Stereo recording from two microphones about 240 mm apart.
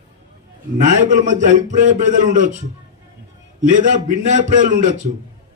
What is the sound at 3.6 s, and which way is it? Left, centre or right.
A man's voice, right.